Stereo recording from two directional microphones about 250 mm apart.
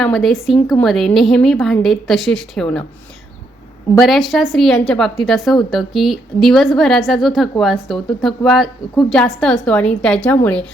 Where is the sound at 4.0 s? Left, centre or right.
Centre.